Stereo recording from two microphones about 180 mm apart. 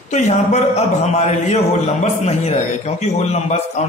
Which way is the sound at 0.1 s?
40° left (ahead or behind).